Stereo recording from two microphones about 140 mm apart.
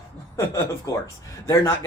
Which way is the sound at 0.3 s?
20° left (ahead or behind).